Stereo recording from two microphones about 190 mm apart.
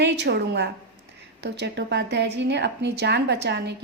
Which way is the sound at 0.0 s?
60° right (ahead or behind).